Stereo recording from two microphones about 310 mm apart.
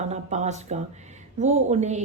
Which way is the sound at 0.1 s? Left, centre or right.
Right.